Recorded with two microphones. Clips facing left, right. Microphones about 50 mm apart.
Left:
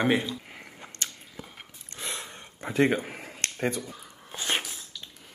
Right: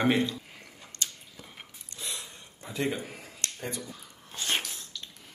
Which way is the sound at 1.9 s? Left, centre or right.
Left.